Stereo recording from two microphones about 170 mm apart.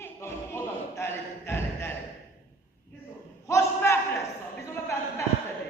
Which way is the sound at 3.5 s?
15° left (ahead or behind).